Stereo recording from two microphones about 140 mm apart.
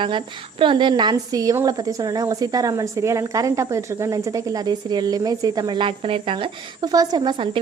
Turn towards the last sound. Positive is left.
turn(degrees=-30)  # may be behind; listen again after turning